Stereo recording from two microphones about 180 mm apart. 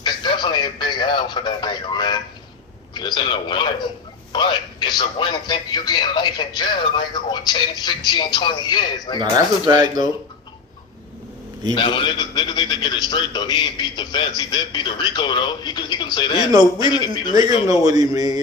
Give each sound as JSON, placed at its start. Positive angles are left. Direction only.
{"t": 0.0, "sound": "radio", "side_deg": 25}
{"t": 2.9, "sound": "a man's voice", "side_deg": 25}
{"t": 9.1, "sound": "speech", "side_deg": -25}
{"t": 11.7, "sound": "a man's voice", "side_deg": 25}
{"t": 16.5, "sound": "speech", "side_deg": -20}
{"t": 16.9, "sound": "a man's voice", "side_deg": 25}
{"t": 17.8, "sound": "speech", "side_deg": -20}